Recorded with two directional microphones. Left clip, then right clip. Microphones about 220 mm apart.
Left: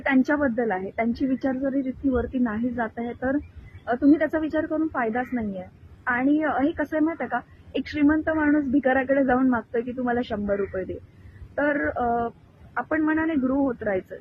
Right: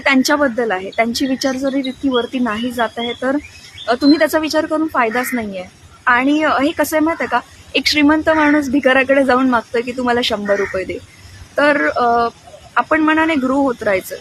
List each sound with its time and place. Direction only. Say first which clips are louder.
0.0 s a woman's voice: right 9 dB; 20° right (ahead or behind)
11.5 s a woman's voice: right 10 dB; 20° right (ahead or behind)